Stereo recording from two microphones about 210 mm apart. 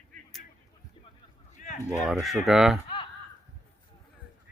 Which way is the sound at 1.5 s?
35° left (ahead or behind).